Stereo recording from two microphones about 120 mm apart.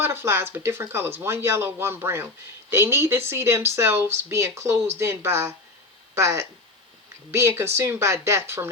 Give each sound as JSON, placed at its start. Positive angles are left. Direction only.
{"t": 0.0, "sound": "speech", "side_deg": -20}